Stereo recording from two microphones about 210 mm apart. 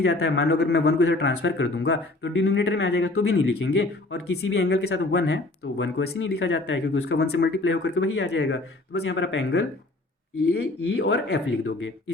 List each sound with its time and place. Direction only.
0.0 s speech: 55° left (ahead or behind)